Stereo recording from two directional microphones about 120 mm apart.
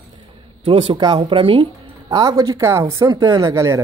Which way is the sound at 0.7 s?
55° right (ahead or behind).